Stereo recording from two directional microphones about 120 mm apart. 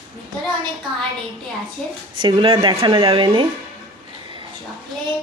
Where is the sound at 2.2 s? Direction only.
45° right (ahead or behind).